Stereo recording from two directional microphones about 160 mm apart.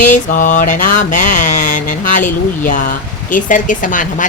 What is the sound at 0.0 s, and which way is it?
A woman's voice, 50° left (ahead or behind).